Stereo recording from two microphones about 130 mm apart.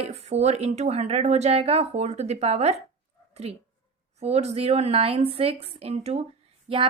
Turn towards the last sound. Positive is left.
turn(degrees=-50)  # may be behind; listen again after turning